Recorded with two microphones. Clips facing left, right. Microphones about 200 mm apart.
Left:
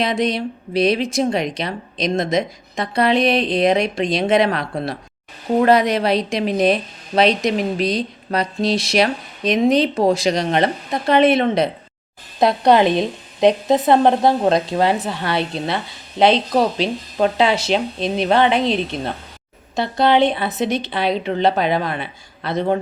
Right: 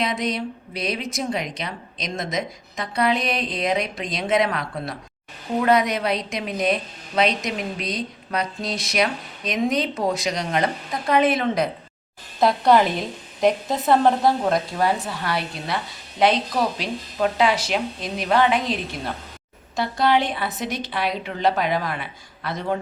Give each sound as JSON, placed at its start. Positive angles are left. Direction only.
{"t": 0.0, "sound": "a woman's voice", "side_deg": 30}
{"t": 5.5, "sound": "a woman's voice", "side_deg": 30}